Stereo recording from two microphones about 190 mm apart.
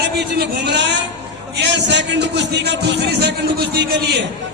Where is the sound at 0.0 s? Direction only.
60° right (ahead or behind).